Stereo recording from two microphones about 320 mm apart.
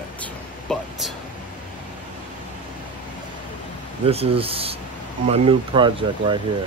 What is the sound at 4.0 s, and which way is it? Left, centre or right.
Speech, centre.